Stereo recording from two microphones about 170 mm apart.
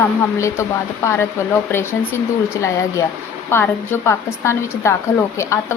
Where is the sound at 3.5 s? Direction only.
15° left (ahead or behind).